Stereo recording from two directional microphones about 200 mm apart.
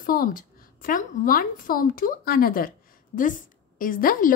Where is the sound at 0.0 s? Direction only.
45° left (ahead or behind).